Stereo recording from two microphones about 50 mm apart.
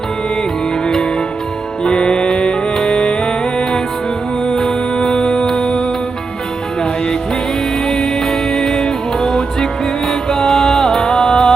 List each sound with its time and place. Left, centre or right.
1.8 s music: centre
7.9 s music: centre